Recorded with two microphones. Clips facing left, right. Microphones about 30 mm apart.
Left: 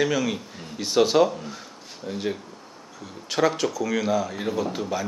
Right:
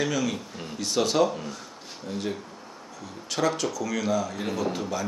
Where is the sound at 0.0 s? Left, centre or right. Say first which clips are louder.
Left 3 dB; centre.